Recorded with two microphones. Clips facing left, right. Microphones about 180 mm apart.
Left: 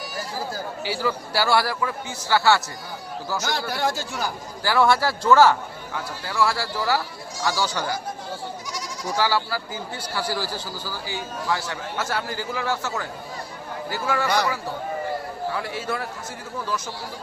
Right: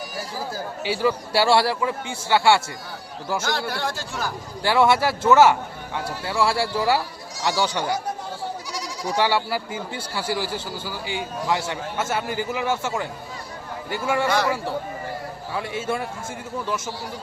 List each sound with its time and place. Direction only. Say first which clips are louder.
0.9 s speech: right 4 dB; 25° right (ahead or behind)
3.5 s a man's voice: left 1 dB; centre (ahead or behind)
4.6 s speech: right 1 dB; 25° right (ahead or behind)
9.0 s speech: right 2 dB; 20° right (ahead or behind)
14.3 s a man's voice: right 1 dB; centre (ahead or behind)
15.5 s speech: right 6 dB; 25° right (ahead or behind)